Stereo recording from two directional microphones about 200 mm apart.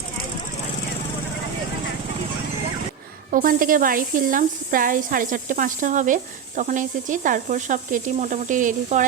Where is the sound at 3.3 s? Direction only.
45° right (ahead or behind).